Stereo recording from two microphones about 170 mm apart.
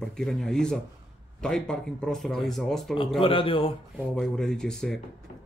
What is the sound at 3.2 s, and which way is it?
Speech, 30° left (ahead or behind).